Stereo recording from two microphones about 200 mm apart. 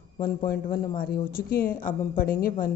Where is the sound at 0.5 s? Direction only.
45° left (ahead or behind).